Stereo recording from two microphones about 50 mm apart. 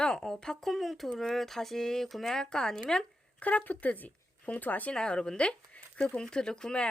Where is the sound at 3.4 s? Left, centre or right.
Left.